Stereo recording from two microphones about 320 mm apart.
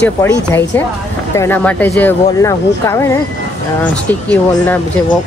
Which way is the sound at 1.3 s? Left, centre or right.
Centre.